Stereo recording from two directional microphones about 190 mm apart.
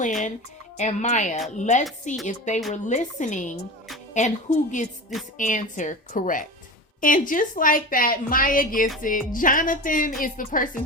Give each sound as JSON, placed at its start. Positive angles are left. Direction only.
{"t": 0.0, "sound": "a woman's voice", "side_deg": 40}